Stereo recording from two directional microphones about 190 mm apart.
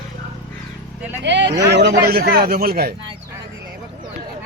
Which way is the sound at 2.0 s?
55° right (ahead or behind).